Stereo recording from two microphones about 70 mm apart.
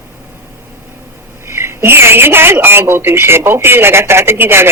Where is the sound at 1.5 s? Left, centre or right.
Right.